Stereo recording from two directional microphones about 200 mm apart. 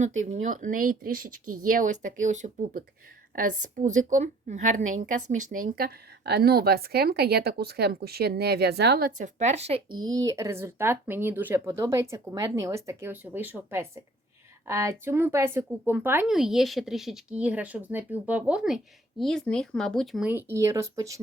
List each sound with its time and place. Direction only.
0.0 s a woman's voice: 35° right (ahead or behind); by 21.2 s 15° right (ahead or behind)